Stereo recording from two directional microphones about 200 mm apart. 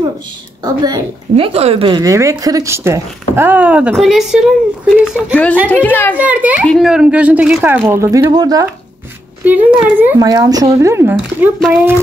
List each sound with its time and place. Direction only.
1.3 s a child's voice: 30° right (ahead or behind); by 6.1 s 10° left (ahead or behind)
6.1 s speech: 5° right (ahead or behind)
9.4 s speech: 10° right (ahead or behind)